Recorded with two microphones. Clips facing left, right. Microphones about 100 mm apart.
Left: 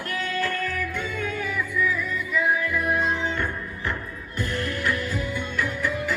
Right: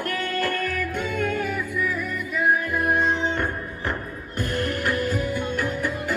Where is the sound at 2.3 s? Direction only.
50° right (ahead or behind).